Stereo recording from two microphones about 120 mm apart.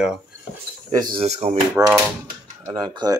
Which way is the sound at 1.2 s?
65° right (ahead or behind).